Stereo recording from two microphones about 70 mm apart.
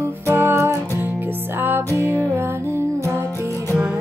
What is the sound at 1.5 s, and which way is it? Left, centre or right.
Music, right.